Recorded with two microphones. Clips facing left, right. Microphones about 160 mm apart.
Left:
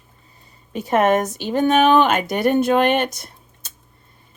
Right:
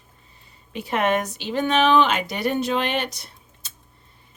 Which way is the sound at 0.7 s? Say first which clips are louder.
Left 5 dB; 45° left (ahead or behind).